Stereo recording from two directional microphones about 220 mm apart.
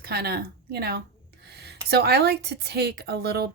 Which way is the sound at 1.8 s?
45° right (ahead or behind).